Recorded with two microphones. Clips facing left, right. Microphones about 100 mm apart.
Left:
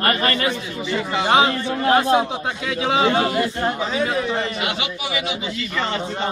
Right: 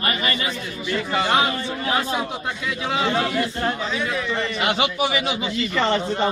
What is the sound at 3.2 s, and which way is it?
Speech, 40° left (ahead or behind).